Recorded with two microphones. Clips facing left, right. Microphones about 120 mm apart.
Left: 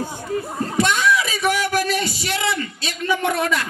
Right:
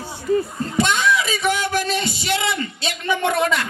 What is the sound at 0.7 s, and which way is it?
Music, 25° right (ahead or behind).